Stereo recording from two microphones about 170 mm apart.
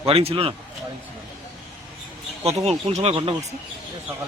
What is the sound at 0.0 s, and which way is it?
Speech, 35° right (ahead or behind).